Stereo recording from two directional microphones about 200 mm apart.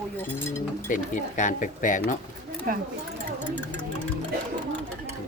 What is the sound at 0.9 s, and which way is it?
Speech, 40° left (ahead or behind).